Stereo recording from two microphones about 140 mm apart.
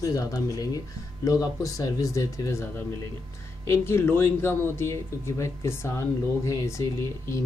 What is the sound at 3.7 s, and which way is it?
Speech, 15° left (ahead or behind).